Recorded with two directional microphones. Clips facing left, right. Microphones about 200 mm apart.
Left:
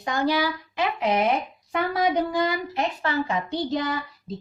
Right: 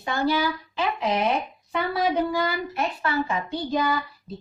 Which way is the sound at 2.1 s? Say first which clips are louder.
Left 1 dB; 20° left (ahead or behind).